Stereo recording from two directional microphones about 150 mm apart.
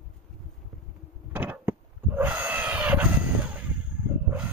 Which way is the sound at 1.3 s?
10° right (ahead or behind).